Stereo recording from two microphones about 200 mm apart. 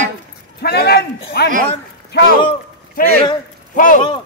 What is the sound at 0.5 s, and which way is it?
Speech, 55° left (ahead or behind).